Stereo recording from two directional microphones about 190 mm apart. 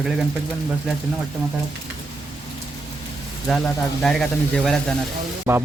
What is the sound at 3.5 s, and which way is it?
Speech, centre (ahead or behind).